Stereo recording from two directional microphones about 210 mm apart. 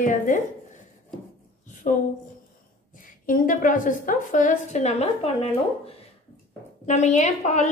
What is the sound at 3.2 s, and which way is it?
A woman's voice, 40° left (ahead or behind).